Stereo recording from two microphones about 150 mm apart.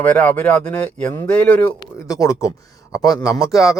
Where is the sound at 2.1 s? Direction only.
20° left (ahead or behind).